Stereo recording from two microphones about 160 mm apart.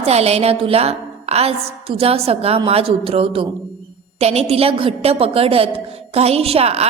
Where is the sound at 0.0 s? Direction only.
40° right (ahead or behind).